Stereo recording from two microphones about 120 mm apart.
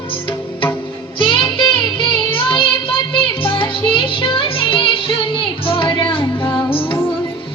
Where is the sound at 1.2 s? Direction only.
45° left (ahead or behind).